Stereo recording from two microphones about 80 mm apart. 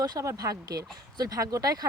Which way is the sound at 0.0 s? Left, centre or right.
Right.